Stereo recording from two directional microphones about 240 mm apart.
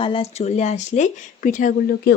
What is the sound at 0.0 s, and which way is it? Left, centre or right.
Speech, left.